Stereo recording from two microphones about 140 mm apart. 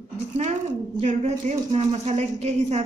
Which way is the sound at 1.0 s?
55° right (ahead or behind).